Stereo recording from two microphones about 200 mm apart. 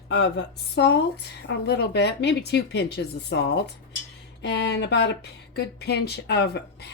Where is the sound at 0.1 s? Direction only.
60° left (ahead or behind).